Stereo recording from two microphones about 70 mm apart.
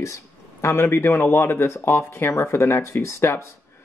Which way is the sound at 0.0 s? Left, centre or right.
Left.